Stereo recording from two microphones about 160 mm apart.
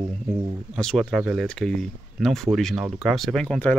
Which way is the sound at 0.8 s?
Centre (ahead or behind).